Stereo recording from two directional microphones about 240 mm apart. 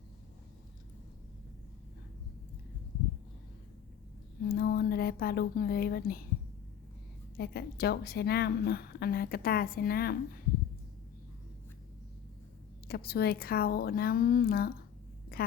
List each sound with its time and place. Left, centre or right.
4.4 s speech: left
7.3 s a woman's voice: left
12.9 s a woman's voice: left
15.3 s a sound: left